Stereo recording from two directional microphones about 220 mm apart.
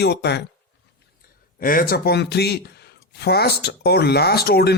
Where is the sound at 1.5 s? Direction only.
40° left (ahead or behind).